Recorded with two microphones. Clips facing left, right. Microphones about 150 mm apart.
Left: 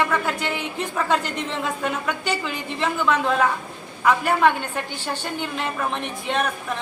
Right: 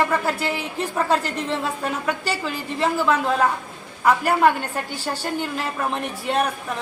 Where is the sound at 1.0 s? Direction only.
35° right (ahead or behind).